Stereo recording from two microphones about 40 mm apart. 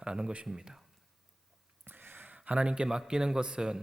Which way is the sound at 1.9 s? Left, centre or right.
Right.